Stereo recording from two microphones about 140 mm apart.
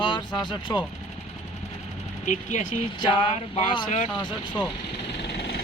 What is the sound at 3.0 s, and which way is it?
Speech, 35° left (ahead or behind).